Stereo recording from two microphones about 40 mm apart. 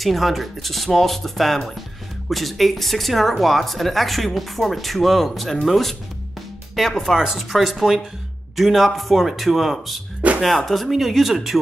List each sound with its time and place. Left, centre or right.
0.0 s speech: centre
7.2 s speech: centre